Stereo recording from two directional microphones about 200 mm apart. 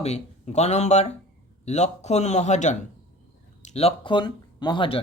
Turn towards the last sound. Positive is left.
turn(degrees=25)  # may be behind; listen again after turning